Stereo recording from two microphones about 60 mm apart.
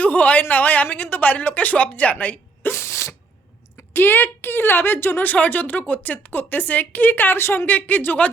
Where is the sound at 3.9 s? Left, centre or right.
Left.